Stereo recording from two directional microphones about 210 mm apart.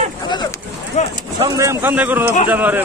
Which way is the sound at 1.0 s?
35° left (ahead or behind).